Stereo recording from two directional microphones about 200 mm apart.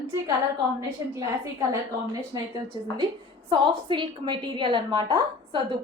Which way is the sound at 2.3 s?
20° right (ahead or behind).